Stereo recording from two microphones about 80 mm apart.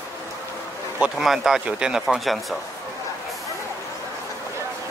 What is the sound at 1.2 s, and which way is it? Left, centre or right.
Speech, centre.